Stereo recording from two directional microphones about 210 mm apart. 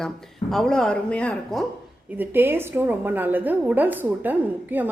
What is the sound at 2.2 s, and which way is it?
A woman's voice, 10° right (ahead or behind).